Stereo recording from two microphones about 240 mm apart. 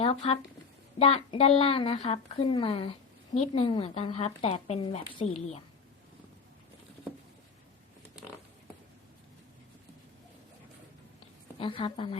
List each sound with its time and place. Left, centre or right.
0.0 s a woman's voice: left
11.6 s a woman's voice: left